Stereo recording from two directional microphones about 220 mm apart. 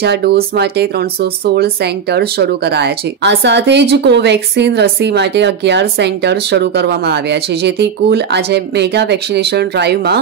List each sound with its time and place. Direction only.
0.0 s speech: 50° right (ahead or behind)